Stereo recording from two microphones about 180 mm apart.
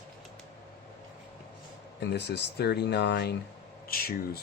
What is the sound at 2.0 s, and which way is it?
Speech, 70° left (ahead or behind).